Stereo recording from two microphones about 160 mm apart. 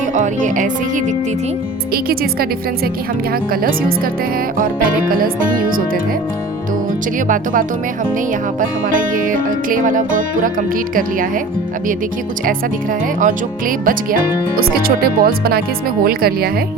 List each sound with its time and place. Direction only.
0.1 s music: 50° right (ahead or behind)
1.9 s speech: 70° right (ahead or behind)
3.5 s music: 65° right (ahead or behind)
8.6 s music: 55° right (ahead or behind)
13.1 s speech: 55° right (ahead or behind); by 16.5 s 70° right (ahead or behind)